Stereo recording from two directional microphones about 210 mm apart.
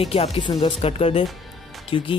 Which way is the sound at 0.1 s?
30° left (ahead or behind).